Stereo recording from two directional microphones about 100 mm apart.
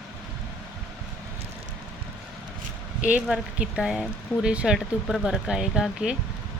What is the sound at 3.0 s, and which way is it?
Speech, 10° right (ahead or behind).